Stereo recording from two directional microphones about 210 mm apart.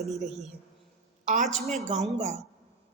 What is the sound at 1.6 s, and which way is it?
Speech, 35° right (ahead or behind).